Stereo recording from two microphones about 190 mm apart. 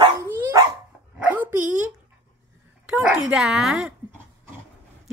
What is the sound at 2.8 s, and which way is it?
Speech, 5° right (ahead or behind).